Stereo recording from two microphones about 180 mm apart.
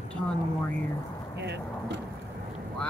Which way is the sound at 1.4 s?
70° right (ahead or behind).